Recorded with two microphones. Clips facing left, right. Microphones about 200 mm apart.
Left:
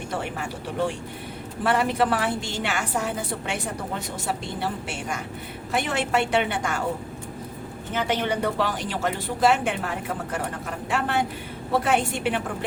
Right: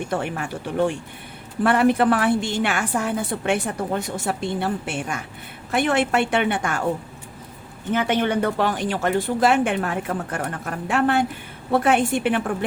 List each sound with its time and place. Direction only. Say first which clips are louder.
0.1 s a woman's voice: right 4 dB; 55° right (ahead or behind)
7.9 s a woman's voice: right 4 dB; 55° right (ahead or behind)